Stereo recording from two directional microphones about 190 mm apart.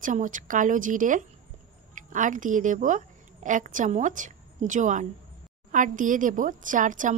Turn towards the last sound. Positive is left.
turn(degrees=-45)  # may be behind; listen again after turning